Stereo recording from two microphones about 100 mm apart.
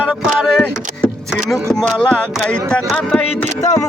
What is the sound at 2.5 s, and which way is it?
Speech, 10° left (ahead or behind).